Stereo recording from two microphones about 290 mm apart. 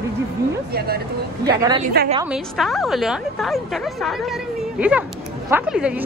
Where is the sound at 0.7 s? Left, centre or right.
Right.